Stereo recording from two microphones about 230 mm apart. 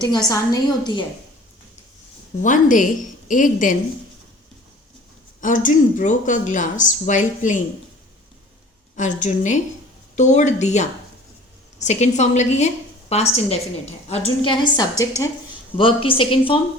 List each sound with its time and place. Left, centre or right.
0.3 s a woman's voice: centre
2.4 s speech: left
5.4 s speech: left
9.0 s a woman's voice: left